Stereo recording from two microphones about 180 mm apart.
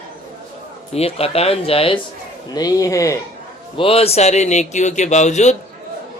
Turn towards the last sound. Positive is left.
turn(degrees=40)  # may be behind; listen again after turning